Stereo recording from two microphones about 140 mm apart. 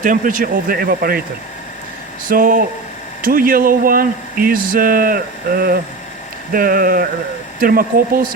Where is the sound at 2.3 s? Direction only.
85° right.